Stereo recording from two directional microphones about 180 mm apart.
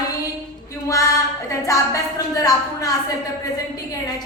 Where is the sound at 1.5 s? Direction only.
15° left (ahead or behind).